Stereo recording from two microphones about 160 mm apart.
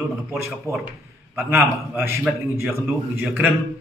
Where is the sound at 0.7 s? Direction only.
20° left (ahead or behind).